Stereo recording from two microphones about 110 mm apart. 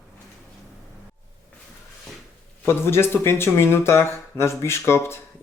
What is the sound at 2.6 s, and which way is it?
Speech, 20° left (ahead or behind).